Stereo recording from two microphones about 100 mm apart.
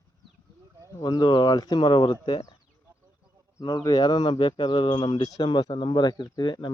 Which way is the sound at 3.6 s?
40° left (ahead or behind).